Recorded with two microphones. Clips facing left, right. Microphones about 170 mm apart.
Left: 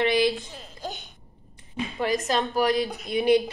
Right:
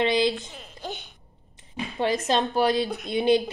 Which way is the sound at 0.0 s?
20° right (ahead or behind).